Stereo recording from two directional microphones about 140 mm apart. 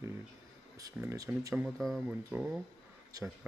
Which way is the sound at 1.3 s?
15° right (ahead or behind).